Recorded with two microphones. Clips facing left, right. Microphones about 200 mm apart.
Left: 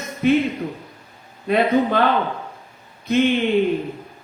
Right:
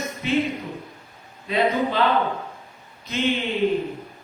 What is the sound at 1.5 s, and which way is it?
Speech, 55° left (ahead or behind).